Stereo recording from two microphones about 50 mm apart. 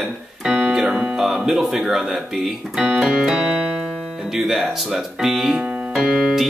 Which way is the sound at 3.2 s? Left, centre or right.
Centre.